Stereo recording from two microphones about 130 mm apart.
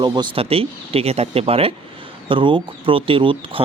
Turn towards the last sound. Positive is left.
turn(degrees=-40)  # may be behind; listen again after turning